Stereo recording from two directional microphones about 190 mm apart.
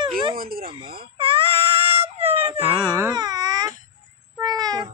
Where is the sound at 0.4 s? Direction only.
50° right (ahead or behind).